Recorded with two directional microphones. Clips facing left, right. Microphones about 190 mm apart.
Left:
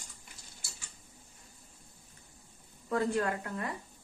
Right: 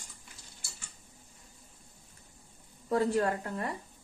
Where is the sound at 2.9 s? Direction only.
35° right (ahead or behind).